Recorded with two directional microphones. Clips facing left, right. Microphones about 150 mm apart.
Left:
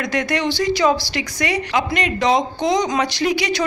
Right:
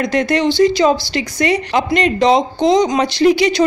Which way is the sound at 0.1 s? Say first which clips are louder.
Right 4 dB; 30° right (ahead or behind).